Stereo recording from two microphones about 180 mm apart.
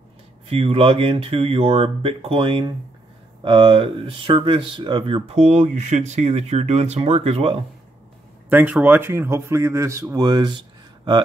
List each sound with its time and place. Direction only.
0.5 s speech: 35° right (ahead or behind)
8.5 s speech: 10° right (ahead or behind); by 10.6 s 25° right (ahead or behind)